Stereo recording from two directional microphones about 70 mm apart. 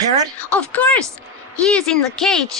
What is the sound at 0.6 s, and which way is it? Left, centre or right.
Speech, left.